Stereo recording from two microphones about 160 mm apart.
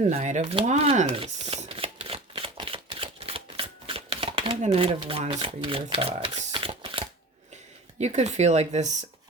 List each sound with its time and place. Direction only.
0.0 s speech: 45° right (ahead or behind)
1.1 s shuffling cards: 35° right (ahead or behind)
7.9 s speech: 45° right (ahead or behind)